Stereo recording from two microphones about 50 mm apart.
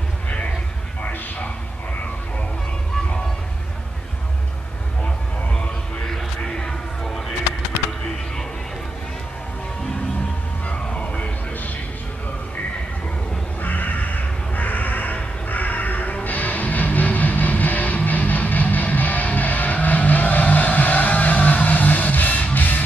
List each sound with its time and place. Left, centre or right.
6.0 s music: centre
10.7 s music: left
13.6 s crow: left
15.4 s music: left